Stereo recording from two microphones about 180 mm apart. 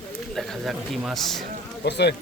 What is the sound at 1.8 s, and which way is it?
Speech, 70° left (ahead or behind).